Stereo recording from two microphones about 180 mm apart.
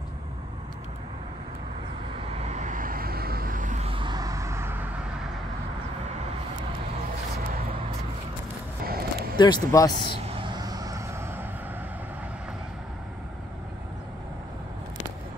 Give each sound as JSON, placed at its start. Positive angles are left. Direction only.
{"t": 2.4, "sound": "vehicle", "side_deg": -40}
{"t": 8.8, "sound": "a sound", "side_deg": -55}
{"t": 9.4, "sound": "speech", "side_deg": 20}
{"t": 10.2, "sound": "vehicle", "side_deg": -25}